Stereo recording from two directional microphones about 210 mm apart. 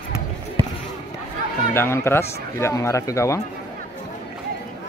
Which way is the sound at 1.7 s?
10° left (ahead or behind).